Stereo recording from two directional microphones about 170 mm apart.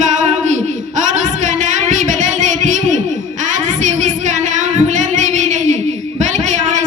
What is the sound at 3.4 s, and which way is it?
Singing, 45° right (ahead or behind).